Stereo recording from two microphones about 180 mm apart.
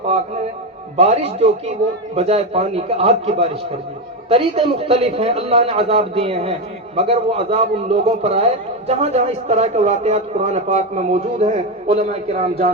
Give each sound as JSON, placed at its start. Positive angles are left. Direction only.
{"t": 0.9, "sound": "speech", "side_deg": -40}